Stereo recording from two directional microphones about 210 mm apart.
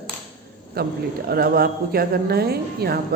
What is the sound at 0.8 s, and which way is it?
A woman's voice, 50° right (ahead or behind).